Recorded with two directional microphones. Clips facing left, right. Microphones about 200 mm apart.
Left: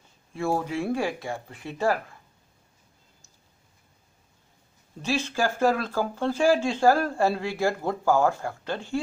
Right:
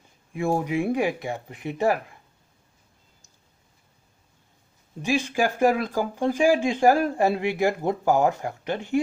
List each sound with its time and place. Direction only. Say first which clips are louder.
0.3 s speech: right 3 dB; 15° right (ahead or behind)
5.0 s speech: right 3 dB; 15° right (ahead or behind)